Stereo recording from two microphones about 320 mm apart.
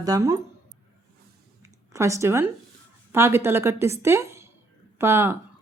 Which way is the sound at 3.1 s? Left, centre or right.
Centre.